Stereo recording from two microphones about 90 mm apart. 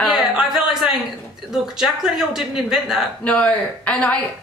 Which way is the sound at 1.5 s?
5° right (ahead or behind).